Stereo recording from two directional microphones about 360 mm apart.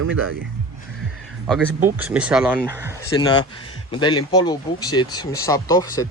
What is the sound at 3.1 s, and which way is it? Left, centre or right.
Speech, centre.